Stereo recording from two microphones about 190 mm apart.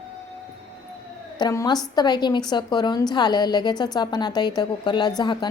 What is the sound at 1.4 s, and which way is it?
A woman's voice, 20° left (ahead or behind).